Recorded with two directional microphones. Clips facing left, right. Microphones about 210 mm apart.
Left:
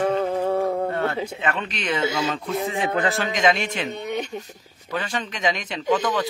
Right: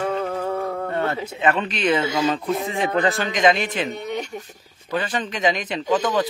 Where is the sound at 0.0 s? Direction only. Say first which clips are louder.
Left 3 dB; 25° left (ahead or behind).